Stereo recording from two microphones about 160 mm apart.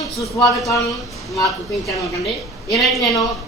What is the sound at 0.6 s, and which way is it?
A woman's voice, centre (ahead or behind).